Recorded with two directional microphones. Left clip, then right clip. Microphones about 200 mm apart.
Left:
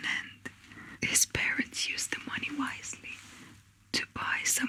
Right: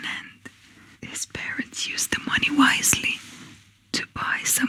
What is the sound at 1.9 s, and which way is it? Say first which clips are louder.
Whispering: right 10 dB; 45° right (ahead or behind).